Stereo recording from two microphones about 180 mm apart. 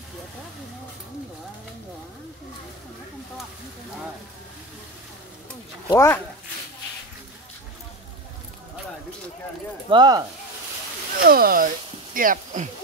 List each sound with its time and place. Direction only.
5.9 s speech: 15° left (ahead or behind)
9.8 s speech: 25° right (ahead or behind)
11.2 s speech: 55° right (ahead or behind)